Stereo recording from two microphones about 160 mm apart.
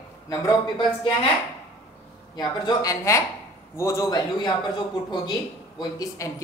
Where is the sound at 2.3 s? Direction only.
25° left (ahead or behind).